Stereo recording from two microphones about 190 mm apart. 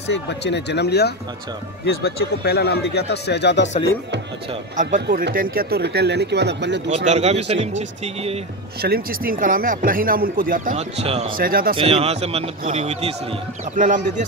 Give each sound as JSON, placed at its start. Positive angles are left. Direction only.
{"t": 0.1, "sound": "speech", "side_deg": 65}
{"t": 5.0, "sound": "speech", "side_deg": -55}
{"t": 7.1, "sound": "speech", "side_deg": -35}
{"t": 8.8, "sound": "speech", "side_deg": -50}
{"t": 11.3, "sound": "speech", "side_deg": -50}
{"t": 11.7, "sound": "speech", "side_deg": -30}